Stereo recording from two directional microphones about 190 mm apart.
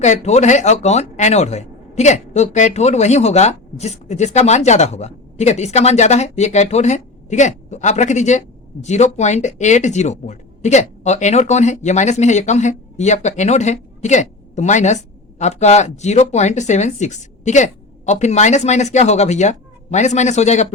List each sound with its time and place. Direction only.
0.0 s speech: 35° left (ahead or behind)